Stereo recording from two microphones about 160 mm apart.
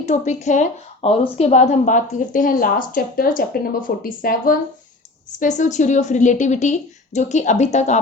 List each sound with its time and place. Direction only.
0.0 s a woman's voice: 45° left (ahead or behind); by 4.5 s 65° left (ahead or behind)
5.4 s a woman's voice: 50° left (ahead or behind)